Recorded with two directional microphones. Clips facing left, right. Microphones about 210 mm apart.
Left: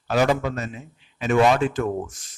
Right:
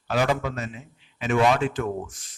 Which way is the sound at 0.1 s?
40° left (ahead or behind).